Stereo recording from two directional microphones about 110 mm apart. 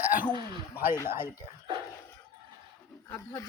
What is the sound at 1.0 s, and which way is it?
Speech, 20° right (ahead or behind).